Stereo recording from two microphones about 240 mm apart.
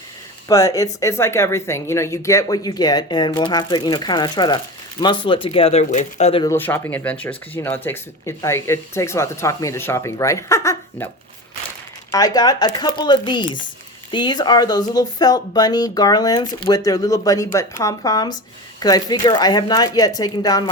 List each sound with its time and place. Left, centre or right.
0.4 s speech: centre
6.5 s speech: centre
12.1 s speech: centre